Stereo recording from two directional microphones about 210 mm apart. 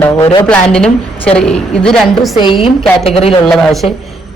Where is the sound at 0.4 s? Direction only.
5° left (ahead or behind).